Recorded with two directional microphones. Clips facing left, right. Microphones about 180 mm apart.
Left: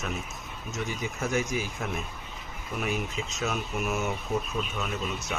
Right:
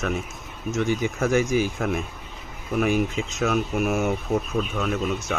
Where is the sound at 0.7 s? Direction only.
90° right.